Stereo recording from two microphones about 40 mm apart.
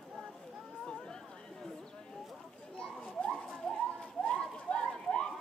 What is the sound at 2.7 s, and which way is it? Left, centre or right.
Children playing, left.